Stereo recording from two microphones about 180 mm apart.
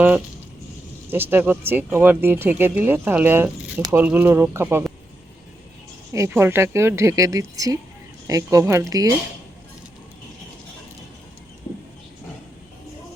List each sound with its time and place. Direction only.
1.1 s speech: 10° right (ahead or behind)
6.1 s speech: 15° right (ahead or behind)